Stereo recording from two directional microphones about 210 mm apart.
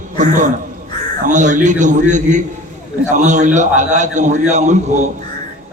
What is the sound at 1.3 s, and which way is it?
A man's voice, 35° right (ahead or behind).